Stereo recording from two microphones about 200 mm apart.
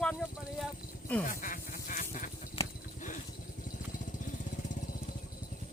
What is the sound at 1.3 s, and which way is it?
Duck, 40° left (ahead or behind).